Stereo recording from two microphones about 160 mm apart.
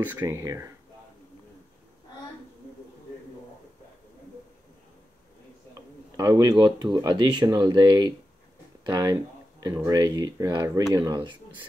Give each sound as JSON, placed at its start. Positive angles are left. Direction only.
{"t": 0.2, "sound": "speech", "side_deg": -20}
{"t": 5.8, "sound": "a sound", "side_deg": -20}
{"t": 6.6, "sound": "speech", "side_deg": -25}